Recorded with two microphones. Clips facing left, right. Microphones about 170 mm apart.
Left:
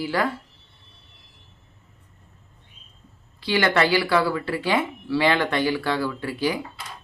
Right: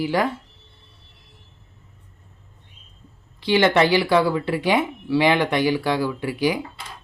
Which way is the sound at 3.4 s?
20° right (ahead or behind).